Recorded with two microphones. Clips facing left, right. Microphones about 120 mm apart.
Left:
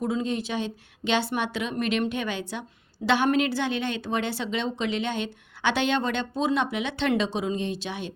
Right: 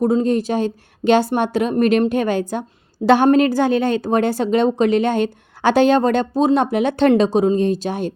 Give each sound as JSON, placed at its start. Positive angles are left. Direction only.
{"t": 0.0, "sound": "speech", "side_deg": -45}